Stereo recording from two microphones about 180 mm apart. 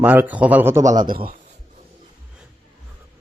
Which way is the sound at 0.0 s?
10° right (ahead or behind).